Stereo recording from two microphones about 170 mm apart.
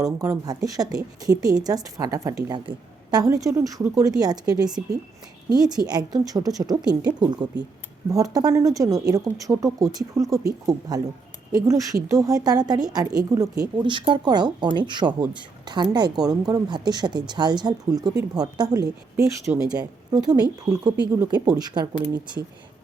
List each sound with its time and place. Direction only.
0.0 s speech: 20° right (ahead or behind)